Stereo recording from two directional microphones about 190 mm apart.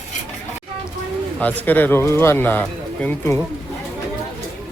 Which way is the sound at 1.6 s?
10° left (ahead or behind).